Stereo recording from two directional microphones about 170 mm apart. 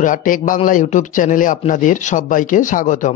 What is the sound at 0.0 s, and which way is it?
Speech, 50° left (ahead or behind).